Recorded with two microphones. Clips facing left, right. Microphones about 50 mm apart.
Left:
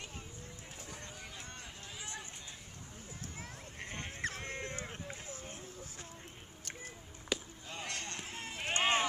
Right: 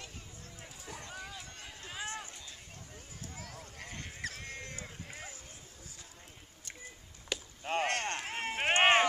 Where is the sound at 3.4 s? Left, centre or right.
Left.